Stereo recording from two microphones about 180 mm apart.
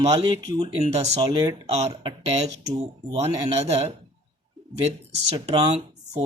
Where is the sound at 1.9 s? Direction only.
25° right (ahead or behind).